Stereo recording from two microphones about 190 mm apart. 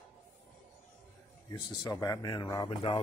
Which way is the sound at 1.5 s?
20° left (ahead or behind).